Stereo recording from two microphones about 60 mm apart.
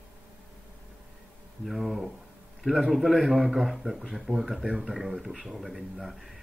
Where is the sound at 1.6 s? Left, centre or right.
Centre.